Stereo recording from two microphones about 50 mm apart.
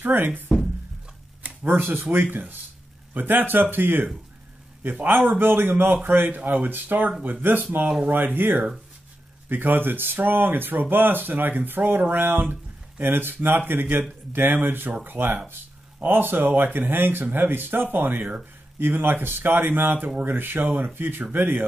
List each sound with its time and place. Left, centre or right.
0.0 s speech: right
1.7 s speech: right